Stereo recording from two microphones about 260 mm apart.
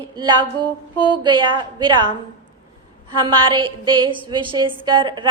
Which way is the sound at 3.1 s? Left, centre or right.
Centre.